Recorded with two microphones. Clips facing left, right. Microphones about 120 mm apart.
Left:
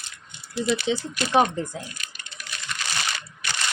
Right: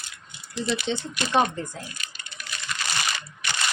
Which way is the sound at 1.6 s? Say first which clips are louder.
Left 4 dB; 15° left (ahead or behind).